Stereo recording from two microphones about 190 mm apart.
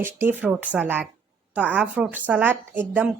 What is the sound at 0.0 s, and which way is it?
A woman's voice, 10° right (ahead or behind).